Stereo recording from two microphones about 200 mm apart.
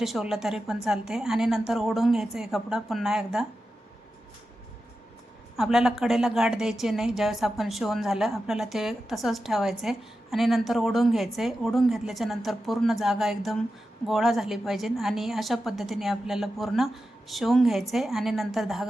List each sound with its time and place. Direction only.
0.0 s a woman's voice: centre (ahead or behind)
5.5 s a woman's voice: centre (ahead or behind)